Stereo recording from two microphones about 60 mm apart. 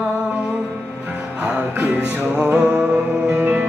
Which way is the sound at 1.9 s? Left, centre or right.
Centre.